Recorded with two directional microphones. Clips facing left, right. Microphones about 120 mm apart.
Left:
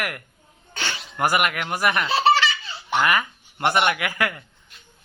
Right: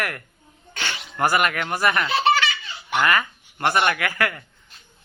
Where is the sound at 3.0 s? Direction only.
15° left (ahead or behind).